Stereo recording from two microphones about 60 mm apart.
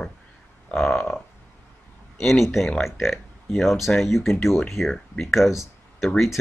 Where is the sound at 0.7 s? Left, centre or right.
Centre.